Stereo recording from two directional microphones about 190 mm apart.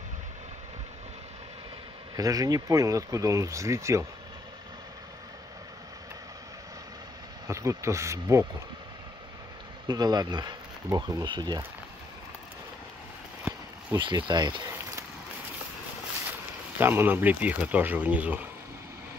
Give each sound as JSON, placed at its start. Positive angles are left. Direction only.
{"t": 2.1, "sound": "speech", "side_deg": -20}
{"t": 7.4, "sound": "speech", "side_deg": -15}
{"t": 9.8, "sound": "speech", "side_deg": -20}
{"t": 13.9, "sound": "speech", "side_deg": -25}
{"t": 16.7, "sound": "speech", "side_deg": -10}